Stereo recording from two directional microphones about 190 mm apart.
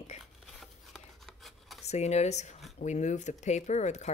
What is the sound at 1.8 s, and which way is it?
A woman's voice, 35° left (ahead or behind).